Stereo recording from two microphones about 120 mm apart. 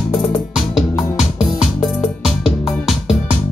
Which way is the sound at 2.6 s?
Centre (ahead or behind).